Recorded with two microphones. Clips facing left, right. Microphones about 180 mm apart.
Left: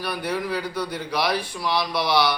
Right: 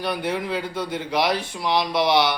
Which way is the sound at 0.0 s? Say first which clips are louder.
Right 2 dB; 20° right (ahead or behind).